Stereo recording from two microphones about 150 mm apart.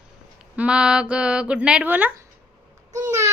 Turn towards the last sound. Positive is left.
turn(degrees=-20)  # may be behind; listen again after turning